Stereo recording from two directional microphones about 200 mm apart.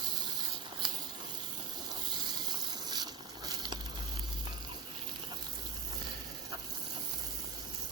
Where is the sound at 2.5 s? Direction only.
20° right (ahead or behind).